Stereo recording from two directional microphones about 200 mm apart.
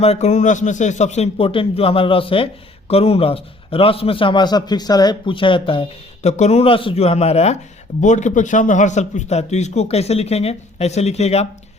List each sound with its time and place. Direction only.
0.0 s a man's voice: 35° left (ahead or behind)